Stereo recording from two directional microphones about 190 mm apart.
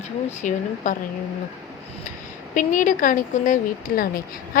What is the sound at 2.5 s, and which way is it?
A woman's voice, 45° left (ahead or behind).